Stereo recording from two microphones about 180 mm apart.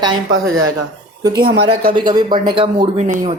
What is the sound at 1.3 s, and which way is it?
Speech, 60° right (ahead or behind).